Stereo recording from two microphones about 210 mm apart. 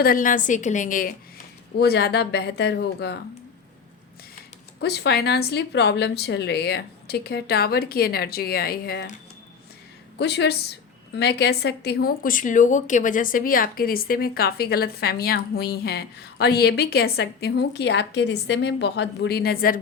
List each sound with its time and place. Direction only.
0.0 s a woman's voice: 40° left (ahead or behind)
4.8 s a woman's voice: 50° left (ahead or behind)
10.2 s a woman's voice: 55° left (ahead or behind)